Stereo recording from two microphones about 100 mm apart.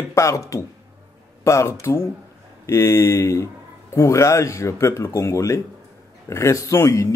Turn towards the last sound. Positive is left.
turn(degrees=30)  # may be behind; listen again after turning